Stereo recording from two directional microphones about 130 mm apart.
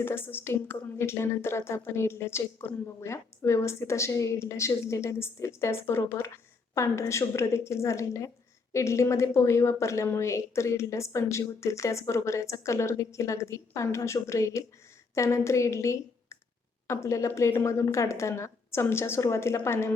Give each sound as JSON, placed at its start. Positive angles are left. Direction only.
{"t": 0.0, "sound": "speech", "side_deg": 15}